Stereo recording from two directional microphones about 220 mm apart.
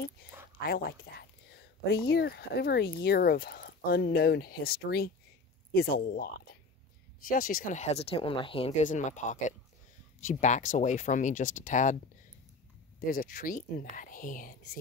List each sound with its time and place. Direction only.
0.7 s speech: 45° left (ahead or behind)
13.0 s speech: 40° left (ahead or behind)